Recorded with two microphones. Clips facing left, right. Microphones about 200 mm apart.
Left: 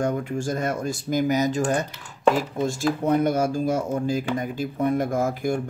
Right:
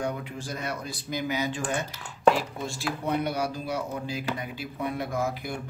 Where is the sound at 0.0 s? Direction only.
45° left (ahead or behind).